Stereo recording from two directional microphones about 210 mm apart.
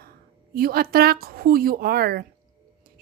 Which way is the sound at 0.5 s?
45° right (ahead or behind).